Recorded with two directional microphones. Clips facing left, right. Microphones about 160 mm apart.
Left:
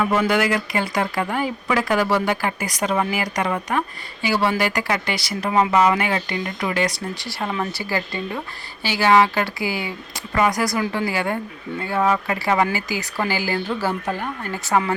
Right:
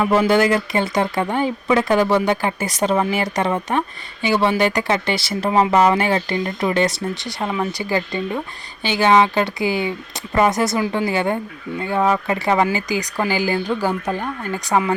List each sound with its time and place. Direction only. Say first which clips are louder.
0.0 s speech: right 4 dB; 30° right (ahead or behind)